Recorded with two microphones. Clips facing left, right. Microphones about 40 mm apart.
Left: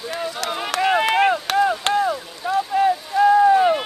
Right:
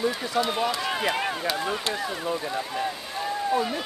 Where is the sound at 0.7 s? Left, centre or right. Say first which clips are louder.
Left 7 dB; left.